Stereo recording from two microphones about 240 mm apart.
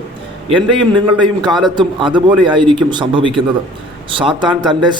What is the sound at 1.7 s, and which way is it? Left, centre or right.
A man's voice, centre.